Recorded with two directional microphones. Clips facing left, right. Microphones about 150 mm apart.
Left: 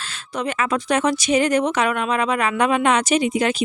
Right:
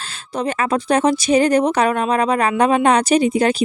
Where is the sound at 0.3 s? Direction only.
35° right (ahead or behind).